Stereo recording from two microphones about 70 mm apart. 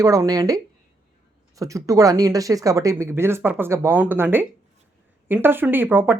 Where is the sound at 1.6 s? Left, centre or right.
Right.